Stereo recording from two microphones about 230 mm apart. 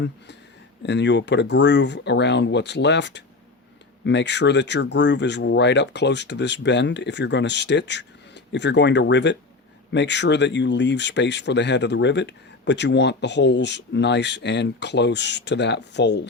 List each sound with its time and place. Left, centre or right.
0.8 s speech: left